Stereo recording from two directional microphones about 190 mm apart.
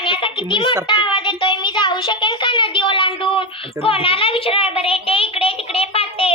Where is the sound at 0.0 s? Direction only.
25° left (ahead or behind).